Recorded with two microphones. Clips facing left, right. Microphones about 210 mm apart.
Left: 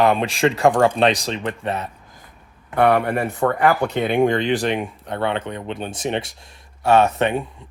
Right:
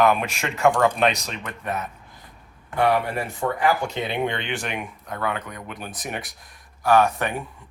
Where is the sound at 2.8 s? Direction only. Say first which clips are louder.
Left 4 dB; 60° left (ahead or behind).